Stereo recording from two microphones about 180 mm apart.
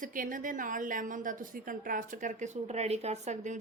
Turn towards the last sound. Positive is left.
turn(degrees=-40)  # may be behind; listen again after turning